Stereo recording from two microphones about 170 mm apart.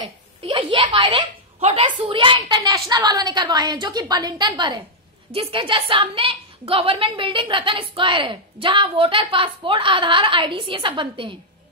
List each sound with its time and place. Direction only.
0.0 s a woman's voice: 30° right (ahead or behind)